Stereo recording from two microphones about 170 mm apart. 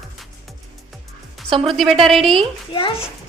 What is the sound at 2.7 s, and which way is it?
Speech, 30° left (ahead or behind).